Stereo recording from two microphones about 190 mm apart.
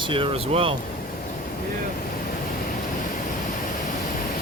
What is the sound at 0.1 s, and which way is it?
Speech, 30° right (ahead or behind).